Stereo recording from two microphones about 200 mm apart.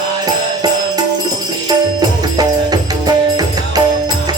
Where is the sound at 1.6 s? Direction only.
20° right (ahead or behind).